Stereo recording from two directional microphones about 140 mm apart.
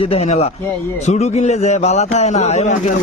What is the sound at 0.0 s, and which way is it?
A man's voice, 45° left (ahead or behind).